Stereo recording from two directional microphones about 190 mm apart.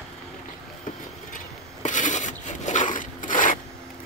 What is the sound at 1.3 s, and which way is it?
Filing, 40° left (ahead or behind).